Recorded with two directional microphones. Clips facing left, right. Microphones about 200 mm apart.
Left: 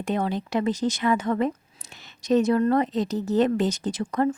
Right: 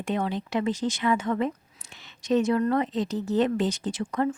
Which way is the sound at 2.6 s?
40° left (ahead or behind).